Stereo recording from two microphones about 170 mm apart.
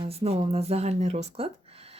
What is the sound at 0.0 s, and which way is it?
Speech, 35° right (ahead or behind).